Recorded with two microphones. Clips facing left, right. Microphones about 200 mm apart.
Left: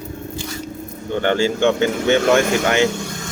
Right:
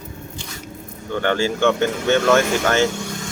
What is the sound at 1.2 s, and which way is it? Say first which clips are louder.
Speech: left 2 dB; 20° left (ahead or behind).